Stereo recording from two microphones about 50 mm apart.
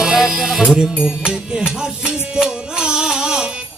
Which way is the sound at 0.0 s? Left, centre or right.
Centre.